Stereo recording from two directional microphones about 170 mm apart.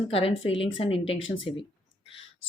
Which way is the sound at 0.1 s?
35° left (ahead or behind).